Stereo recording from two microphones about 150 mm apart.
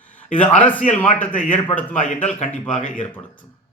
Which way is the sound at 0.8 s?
60° left (ahead or behind).